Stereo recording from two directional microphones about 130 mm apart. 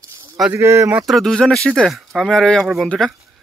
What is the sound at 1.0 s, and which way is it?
Speech, centre (ahead or behind).